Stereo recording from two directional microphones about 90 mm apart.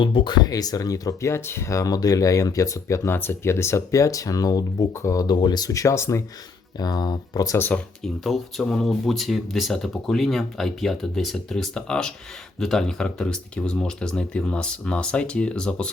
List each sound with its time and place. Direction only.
0.0 s speech: 75° left (ahead or behind)
0.3 s speech: 45° left (ahead or behind)
4.9 s speech: 35° left (ahead or behind)
5.2 s speech: 50° left (ahead or behind); by 6.2 s 30° left (ahead or behind)
6.7 s speech: 50° left (ahead or behind)
8.2 s speech: centre (ahead or behind)